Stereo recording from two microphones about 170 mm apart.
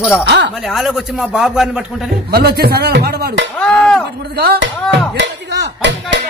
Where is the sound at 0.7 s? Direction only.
Centre (ahead or behind).